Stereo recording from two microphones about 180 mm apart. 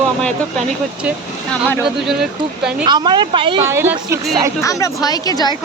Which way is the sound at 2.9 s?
25° right (ahead or behind).